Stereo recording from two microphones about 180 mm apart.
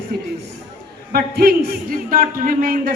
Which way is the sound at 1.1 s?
60° right (ahead or behind).